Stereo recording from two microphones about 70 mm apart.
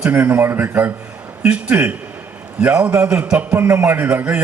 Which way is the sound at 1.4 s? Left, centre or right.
Centre.